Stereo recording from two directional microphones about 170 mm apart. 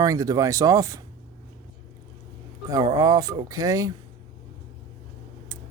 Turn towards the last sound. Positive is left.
turn(degrees=-20)  # may be behind; listen again after turning